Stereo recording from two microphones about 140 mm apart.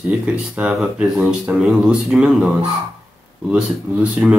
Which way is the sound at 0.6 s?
10° right (ahead or behind).